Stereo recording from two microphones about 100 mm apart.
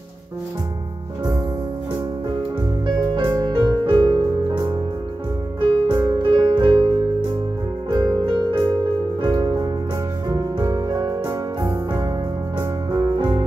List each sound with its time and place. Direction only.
3.2 s music: 50° right (ahead or behind)